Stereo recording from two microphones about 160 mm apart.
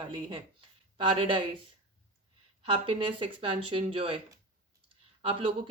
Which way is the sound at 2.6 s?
30° right (ahead or behind).